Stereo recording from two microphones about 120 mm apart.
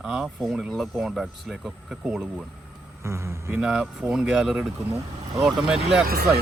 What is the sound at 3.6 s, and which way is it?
Speech, 5° right (ahead or behind).